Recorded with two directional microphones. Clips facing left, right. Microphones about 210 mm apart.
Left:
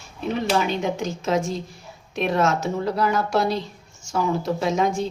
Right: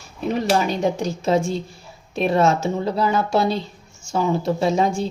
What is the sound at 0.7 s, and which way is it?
Speech, 35° right (ahead or behind).